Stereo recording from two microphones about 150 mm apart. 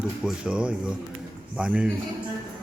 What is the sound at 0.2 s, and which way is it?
A man's voice, 5° right (ahead or behind).